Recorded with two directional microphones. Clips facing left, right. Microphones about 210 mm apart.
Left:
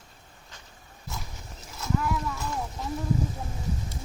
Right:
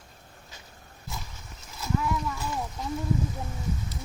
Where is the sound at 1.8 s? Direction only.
Centre (ahead or behind).